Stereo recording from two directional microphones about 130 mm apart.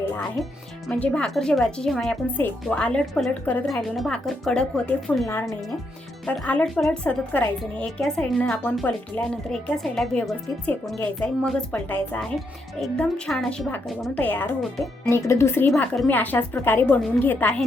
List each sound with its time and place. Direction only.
0.4 s a woman's voice: centre (ahead or behind)
5.3 s a woman's voice: 20° left (ahead or behind)
14.6 s a woman's voice: centre (ahead or behind)
15.1 s speech: 20° left (ahead or behind)
15.7 s speech: 10° left (ahead or behind)